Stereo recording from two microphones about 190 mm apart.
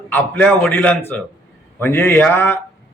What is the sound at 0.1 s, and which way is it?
A man's voice, 10° left (ahead or behind).